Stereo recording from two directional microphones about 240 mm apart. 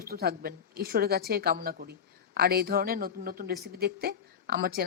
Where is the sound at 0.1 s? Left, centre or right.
Right.